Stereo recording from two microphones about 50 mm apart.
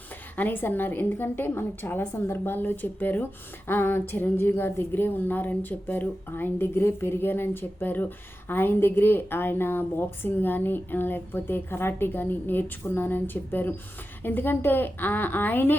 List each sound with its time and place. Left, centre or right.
0.3 s a woman's voice: left
2.1 s a woman's voice: left